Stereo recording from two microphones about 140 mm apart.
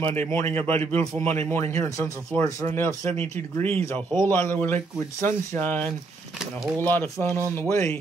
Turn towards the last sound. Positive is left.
turn(degrees=20)  # may be behind; listen again after turning